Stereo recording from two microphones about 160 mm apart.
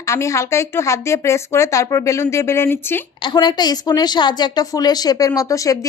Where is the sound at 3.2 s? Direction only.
25° left (ahead or behind).